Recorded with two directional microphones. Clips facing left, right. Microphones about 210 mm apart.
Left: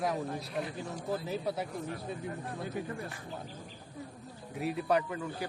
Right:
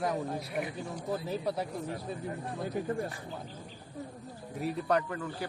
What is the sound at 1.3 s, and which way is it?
Speech, centre (ahead or behind).